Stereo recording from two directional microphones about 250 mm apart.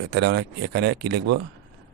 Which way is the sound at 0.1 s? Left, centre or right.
Right.